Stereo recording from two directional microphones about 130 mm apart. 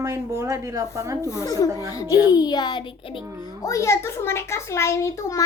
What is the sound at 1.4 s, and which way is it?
A child's voice, 25° left (ahead or behind).